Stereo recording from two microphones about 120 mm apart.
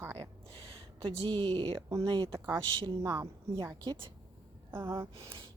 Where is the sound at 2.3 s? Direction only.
20° right (ahead or behind).